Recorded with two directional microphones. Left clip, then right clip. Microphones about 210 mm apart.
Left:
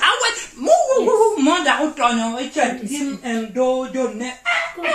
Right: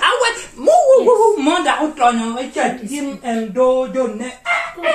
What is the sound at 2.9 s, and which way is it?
Speech, centre (ahead or behind).